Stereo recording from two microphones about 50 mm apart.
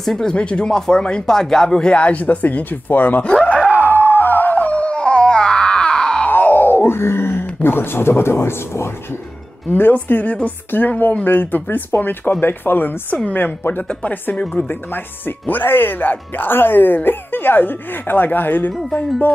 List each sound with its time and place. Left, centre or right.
0.0 s speech: centre; by 3.3 s left
3.8 s a sound: left; by 6.2 s centre
6.2 s groan: left
7.6 s speech: left
9.7 s speech: left
10.2 s speech: left
10.7 s speech: left
13.1 s speech: left
13.4 s speech: left
14.3 s speech: left
14.6 s speech: left